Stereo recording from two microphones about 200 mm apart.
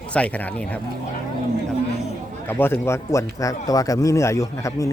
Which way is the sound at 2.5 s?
10° left (ahead or behind).